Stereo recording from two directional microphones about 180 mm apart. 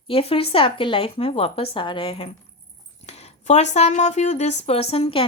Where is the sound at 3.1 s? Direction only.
35° left (ahead or behind).